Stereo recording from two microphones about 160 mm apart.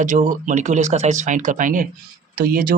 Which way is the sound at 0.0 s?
55° right (ahead or behind).